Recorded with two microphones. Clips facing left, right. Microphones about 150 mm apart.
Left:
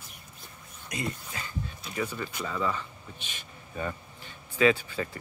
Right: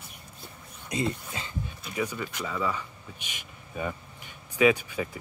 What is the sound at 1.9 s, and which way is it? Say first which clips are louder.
Speech: right 1 dB; 5° right (ahead or behind).